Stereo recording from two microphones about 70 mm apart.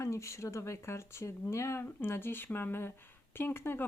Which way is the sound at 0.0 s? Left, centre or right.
Left.